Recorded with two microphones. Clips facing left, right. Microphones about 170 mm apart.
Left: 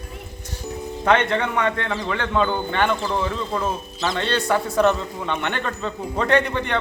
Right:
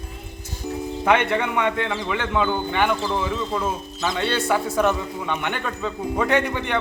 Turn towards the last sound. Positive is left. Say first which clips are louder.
# left 1 dB
turn(degrees=-10)  # may be behind; listen again after turning